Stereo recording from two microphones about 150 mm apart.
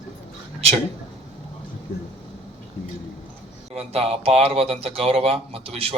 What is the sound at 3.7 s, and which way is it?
Speech, 40° right (ahead or behind).